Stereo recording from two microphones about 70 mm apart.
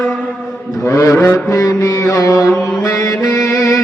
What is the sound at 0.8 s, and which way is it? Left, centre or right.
Mantra, left.